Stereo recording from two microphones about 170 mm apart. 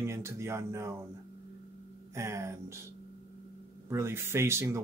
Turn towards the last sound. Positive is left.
turn(degrees=-15)  # may be behind; listen again after turning